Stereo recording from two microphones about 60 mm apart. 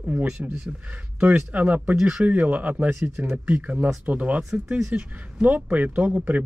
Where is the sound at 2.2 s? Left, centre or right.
Right.